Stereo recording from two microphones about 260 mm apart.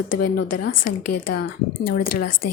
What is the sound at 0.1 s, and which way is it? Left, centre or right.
Speech, left.